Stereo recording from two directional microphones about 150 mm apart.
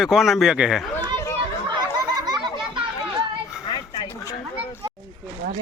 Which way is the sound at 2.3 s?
30° right (ahead or behind).